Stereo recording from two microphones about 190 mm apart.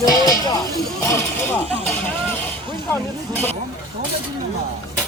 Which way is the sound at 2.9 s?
10° left (ahead or behind).